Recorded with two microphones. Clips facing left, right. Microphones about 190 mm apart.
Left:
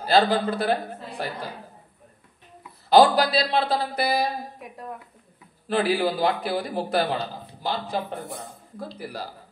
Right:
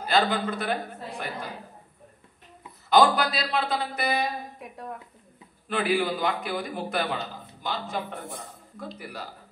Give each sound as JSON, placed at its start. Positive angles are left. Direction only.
{"t": 0.0, "sound": "speech", "side_deg": 35}
{"t": 2.9, "sound": "speech", "side_deg": 35}
{"t": 4.6, "sound": "a woman's voice", "side_deg": 0}
{"t": 5.7, "sound": "speech", "side_deg": 35}